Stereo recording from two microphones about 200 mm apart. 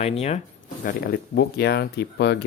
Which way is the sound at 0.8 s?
50° left (ahead or behind).